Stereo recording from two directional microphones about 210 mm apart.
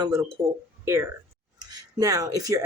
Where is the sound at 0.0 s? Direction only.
15° right (ahead or behind).